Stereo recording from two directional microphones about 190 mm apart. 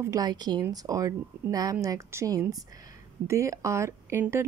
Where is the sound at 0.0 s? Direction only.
20° right (ahead or behind).